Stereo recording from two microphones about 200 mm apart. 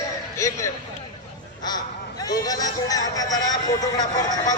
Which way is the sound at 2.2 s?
20° left (ahead or behind).